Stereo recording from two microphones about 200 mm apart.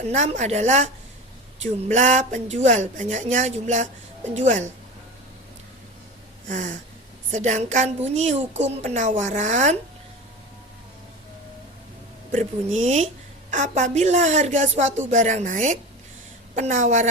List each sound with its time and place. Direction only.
0.1 s a woman's voice: 35° right (ahead or behind)
6.5 s a woman's voice: 40° right (ahead or behind)
12.3 s a woman's voice: 35° right (ahead or behind)